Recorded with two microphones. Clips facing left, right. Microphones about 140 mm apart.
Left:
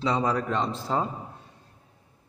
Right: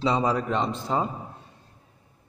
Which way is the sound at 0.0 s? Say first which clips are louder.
Right 2 dB; 15° right (ahead or behind).